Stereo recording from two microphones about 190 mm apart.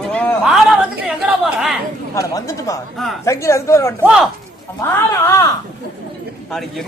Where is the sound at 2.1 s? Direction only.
15° left (ahead or behind).